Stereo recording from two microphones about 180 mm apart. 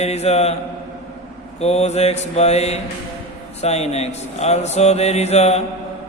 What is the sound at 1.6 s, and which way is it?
Speech, 35° left (ahead or behind).